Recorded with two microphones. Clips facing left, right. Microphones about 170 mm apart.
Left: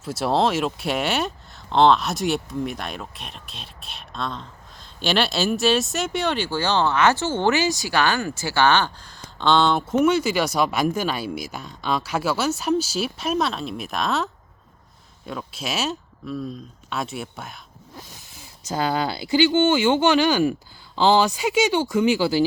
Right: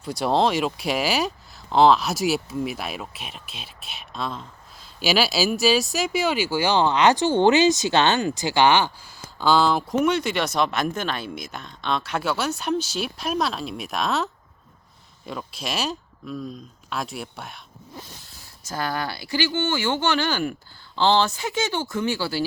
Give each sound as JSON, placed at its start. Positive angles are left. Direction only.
{"t": 0.0, "sound": "speech", "side_deg": 0}
{"t": 15.3, "sound": "speech", "side_deg": 0}
{"t": 18.7, "sound": "speech", "side_deg": 20}